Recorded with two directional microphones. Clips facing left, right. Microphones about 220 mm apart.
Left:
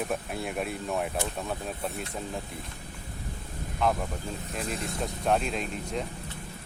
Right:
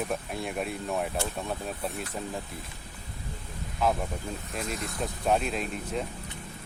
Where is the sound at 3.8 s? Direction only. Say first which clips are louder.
Even; 5° right (ahead or behind).